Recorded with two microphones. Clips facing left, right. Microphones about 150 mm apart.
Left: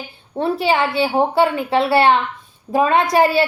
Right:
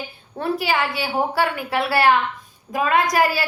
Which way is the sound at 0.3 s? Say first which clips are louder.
Left 4 dB; 25° left (ahead or behind).